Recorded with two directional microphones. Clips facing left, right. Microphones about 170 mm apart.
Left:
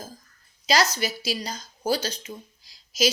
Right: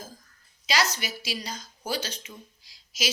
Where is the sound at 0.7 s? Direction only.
40° left (ahead or behind).